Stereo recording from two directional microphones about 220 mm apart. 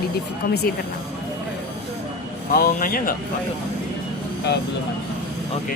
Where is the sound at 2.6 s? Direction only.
40° left (ahead or behind).